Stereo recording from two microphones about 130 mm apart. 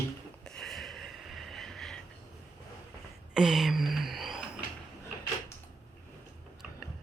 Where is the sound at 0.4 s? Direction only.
5° left (ahead or behind).